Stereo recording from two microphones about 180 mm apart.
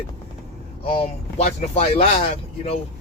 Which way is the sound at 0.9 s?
35° left (ahead or behind).